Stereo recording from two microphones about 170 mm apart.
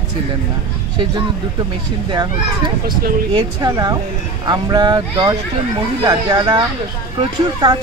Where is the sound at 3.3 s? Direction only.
25° right (ahead or behind).